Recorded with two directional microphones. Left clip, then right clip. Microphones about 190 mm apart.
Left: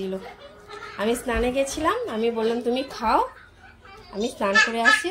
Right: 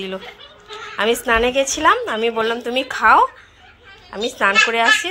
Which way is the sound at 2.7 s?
20° right (ahead or behind).